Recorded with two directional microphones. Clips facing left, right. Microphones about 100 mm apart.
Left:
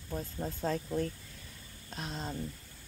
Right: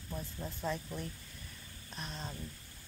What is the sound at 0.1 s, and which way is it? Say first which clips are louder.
Speech: left 5 dB; 45° left (ahead or behind).